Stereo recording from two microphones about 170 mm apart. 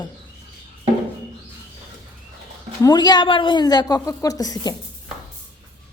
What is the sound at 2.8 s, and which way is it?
A woman's voice, 25° left (ahead or behind).